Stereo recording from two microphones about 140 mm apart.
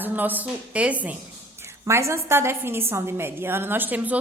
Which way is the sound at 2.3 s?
15° right (ahead or behind).